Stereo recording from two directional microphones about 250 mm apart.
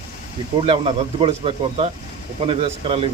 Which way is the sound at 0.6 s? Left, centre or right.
Right.